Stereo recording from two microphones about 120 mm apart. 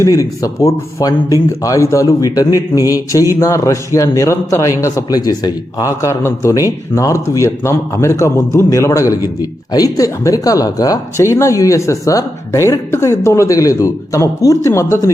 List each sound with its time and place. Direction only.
0.0 s speech: 30° left (ahead or behind)